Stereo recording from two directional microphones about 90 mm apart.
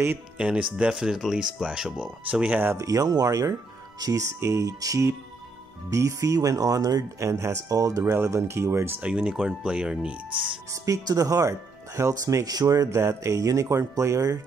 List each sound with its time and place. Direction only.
0.4 s speech: 15° right (ahead or behind)
2.7 s speech: 40° right (ahead or behind)
8.0 s speech: 30° right (ahead or behind)
9.0 s speech: 10° right (ahead or behind)
10.7 s speech: 40° right (ahead or behind)